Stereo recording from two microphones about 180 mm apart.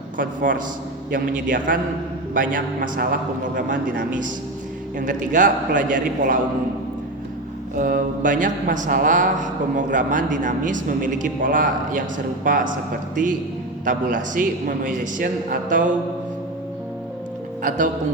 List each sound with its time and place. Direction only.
0.2 s speech: 50° right (ahead or behind)
7.8 s speech: 50° right (ahead or behind)
13.8 s speech: 45° right (ahead or behind)
17.6 s speech: 45° right (ahead or behind)